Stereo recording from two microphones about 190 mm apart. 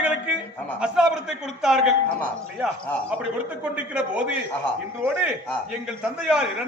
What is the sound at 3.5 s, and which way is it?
A man's voice, 5° right (ahead or behind).